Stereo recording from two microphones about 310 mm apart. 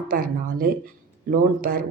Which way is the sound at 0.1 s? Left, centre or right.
Right.